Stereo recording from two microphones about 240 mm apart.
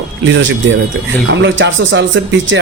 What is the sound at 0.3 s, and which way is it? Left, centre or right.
A man's voice, right.